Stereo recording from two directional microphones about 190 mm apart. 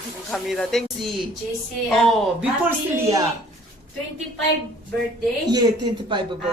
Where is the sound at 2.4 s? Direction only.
10° right (ahead or behind).